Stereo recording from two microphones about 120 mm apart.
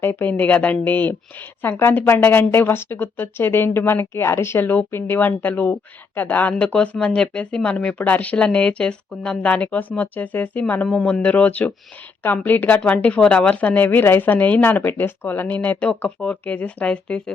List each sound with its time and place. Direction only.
0.0 s speech: 15° left (ahead or behind)